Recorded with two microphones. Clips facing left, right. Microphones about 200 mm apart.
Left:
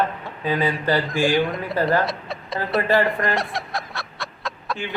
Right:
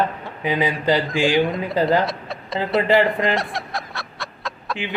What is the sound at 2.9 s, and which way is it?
Speech, 20° right (ahead or behind).